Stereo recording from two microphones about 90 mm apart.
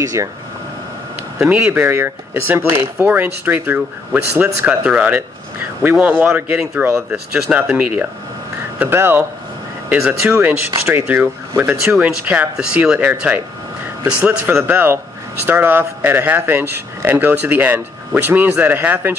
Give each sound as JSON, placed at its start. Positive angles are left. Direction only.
{"t": 0.0, "sound": "speech", "side_deg": -35}
{"t": 1.4, "sound": "speech", "side_deg": -20}
{"t": 9.8, "sound": "speech", "side_deg": -10}
{"t": 10.9, "sound": "speech", "side_deg": -25}